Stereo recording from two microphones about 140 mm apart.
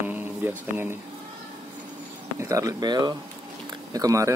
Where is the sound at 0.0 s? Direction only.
15° right (ahead or behind).